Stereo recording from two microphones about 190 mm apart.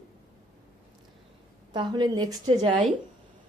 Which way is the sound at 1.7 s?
20° right (ahead or behind).